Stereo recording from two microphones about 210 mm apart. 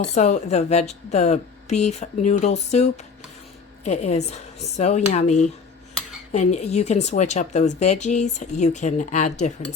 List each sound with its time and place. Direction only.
0.1 s speech: 35° left (ahead or behind)